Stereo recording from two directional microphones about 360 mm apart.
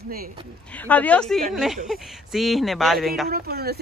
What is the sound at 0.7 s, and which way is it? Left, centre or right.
Speech, centre.